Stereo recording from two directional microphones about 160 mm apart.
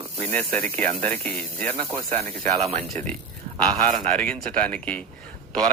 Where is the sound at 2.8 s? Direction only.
10° left (ahead or behind).